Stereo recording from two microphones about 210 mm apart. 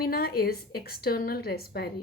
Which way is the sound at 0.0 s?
45° left (ahead or behind).